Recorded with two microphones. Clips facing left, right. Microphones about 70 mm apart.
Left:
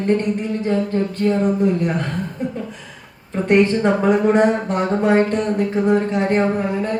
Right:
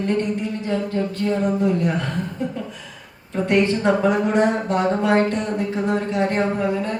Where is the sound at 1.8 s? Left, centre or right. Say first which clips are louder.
Left 1 dB; left.